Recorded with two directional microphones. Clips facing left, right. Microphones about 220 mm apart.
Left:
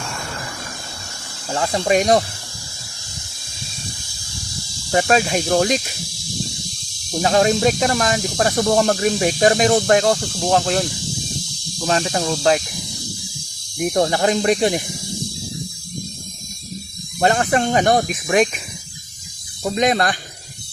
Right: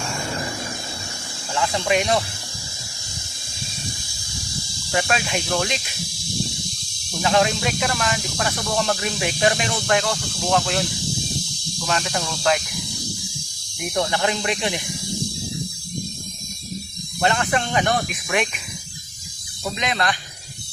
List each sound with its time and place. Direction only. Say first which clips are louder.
1.5 s speech: left 4 dB; 40° left (ahead or behind)
4.9 s speech: left 6 dB; 40° left (ahead or behind)
7.2 s speech: left 4 dB; 40° left (ahead or behind)
11.9 s speech: left 6 dB; 35° left (ahead or behind)
13.7 s speech: left 6 dB; 40° left (ahead or behind)
17.2 s speech: left 4 dB; 40° left (ahead or behind)
19.7 s speech: left 7 dB; 40° left (ahead or behind)